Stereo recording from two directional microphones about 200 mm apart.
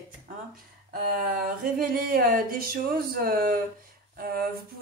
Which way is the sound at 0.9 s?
45° right (ahead or behind).